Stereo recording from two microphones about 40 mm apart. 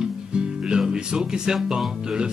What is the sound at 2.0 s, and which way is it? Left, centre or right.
Speech, centre.